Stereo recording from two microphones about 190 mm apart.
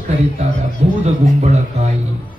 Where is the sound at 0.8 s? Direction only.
35° right (ahead or behind).